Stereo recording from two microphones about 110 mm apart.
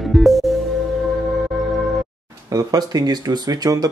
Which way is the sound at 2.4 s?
35° right (ahead or behind).